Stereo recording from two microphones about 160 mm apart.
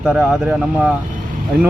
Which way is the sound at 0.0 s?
5° right (ahead or behind).